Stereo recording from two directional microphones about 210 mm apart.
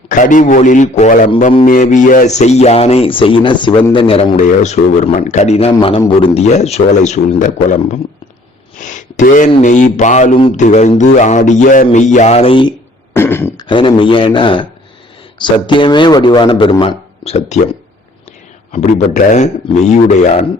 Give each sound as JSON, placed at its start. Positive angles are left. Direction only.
{"t": 0.1, "sound": "speech", "side_deg": 40}
{"t": 13.1, "sound": "beatboxing", "side_deg": 10}
{"t": 13.7, "sound": "a man's voice", "side_deg": 25}
{"t": 18.7, "sound": "speech", "side_deg": 35}